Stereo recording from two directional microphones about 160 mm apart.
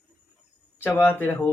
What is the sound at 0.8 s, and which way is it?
Speech, 15° left (ahead or behind).